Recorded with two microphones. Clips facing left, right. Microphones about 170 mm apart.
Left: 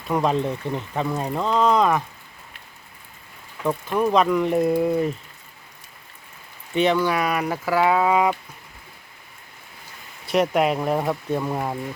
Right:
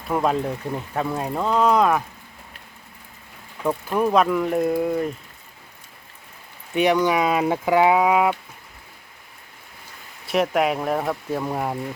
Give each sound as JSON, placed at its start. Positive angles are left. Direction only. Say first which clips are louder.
{"t": 0.1, "sound": "speech", "louder": "even", "side_deg": -5}
{"t": 3.6, "sound": "speech", "louder": "even", "side_deg": -10}
{"t": 6.7, "sound": "speech", "louder": "right 1 dB", "side_deg": -15}
{"t": 10.3, "sound": "speech", "louder": "left 1 dB", "side_deg": 0}